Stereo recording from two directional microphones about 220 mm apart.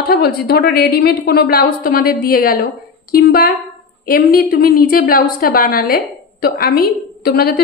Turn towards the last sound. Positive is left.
turn(degrees=45)  # may be behind; listen again after turning